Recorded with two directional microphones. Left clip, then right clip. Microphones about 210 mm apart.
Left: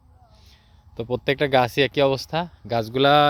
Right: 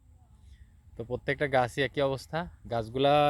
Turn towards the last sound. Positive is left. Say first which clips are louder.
# left 7 dB
turn(degrees=25)  # may be behind; listen again after turning